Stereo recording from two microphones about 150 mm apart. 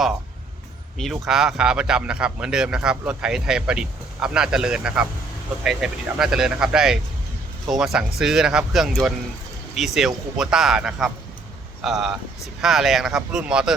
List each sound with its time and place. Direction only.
0.9 s speech: centre (ahead or behind)